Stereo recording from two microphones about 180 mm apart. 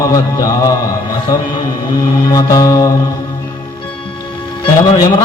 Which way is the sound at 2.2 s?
20° left (ahead or behind).